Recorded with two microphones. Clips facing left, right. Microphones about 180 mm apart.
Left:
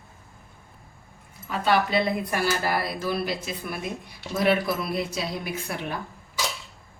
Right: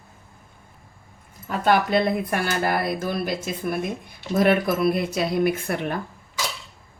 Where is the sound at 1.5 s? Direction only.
50° right (ahead or behind).